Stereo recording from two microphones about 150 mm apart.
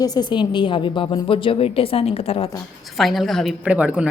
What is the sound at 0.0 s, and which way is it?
A woman's voice, 25° left (ahead or behind).